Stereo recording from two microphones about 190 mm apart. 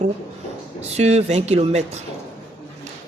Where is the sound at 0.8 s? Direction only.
35° right (ahead or behind).